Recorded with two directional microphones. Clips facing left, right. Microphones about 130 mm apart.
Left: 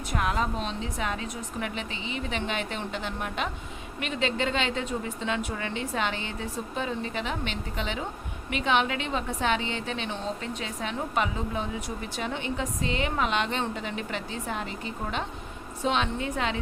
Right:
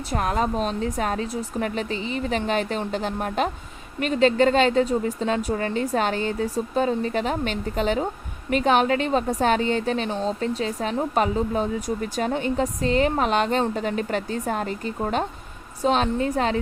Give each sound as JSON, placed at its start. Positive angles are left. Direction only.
{"t": 0.1, "sound": "a woman's voice", "side_deg": -40}